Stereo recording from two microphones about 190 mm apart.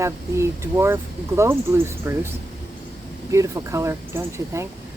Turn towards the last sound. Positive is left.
turn(degrees=-15)  # may be behind; listen again after turning